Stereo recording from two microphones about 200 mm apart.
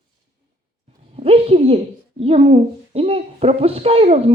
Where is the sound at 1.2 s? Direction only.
30° right (ahead or behind).